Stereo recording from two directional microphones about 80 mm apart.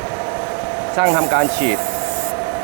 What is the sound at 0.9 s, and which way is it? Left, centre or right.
Rub, right.